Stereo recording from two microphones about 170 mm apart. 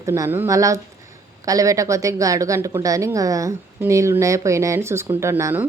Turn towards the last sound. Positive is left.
turn(degrees=-10)  # may be behind; listen again after turning